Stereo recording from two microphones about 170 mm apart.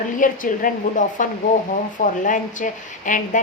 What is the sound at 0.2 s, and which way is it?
A woman's voice, 50° left (ahead or behind).